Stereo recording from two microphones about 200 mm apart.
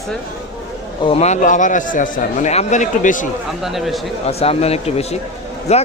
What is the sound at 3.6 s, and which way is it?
Speech, centre (ahead or behind).